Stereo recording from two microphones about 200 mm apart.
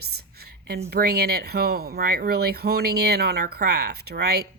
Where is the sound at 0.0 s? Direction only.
50° right (ahead or behind).